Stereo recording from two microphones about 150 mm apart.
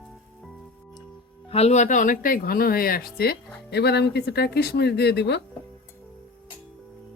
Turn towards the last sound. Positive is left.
turn(degrees=90)